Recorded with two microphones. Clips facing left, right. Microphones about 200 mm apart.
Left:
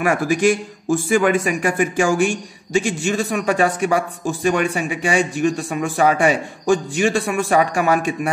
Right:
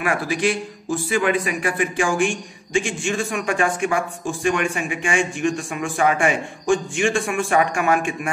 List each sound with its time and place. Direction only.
0.0 s a man's voice: 45° left (ahead or behind)